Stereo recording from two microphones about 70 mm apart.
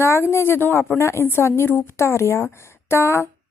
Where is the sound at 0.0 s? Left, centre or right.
Left.